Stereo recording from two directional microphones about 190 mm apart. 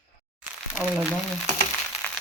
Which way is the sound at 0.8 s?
40° left (ahead or behind).